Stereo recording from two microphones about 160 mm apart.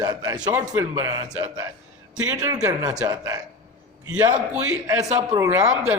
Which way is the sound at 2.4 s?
20° right (ahead or behind).